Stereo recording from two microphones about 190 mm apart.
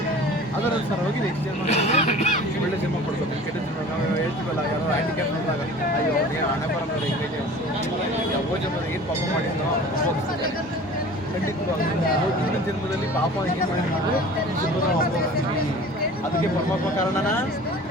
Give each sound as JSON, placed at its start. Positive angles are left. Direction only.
{"t": 1.6, "sound": "vehicle", "side_deg": 35}